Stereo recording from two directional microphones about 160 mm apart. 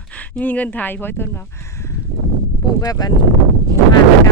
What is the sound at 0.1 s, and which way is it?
Speech, 10° left (ahead or behind).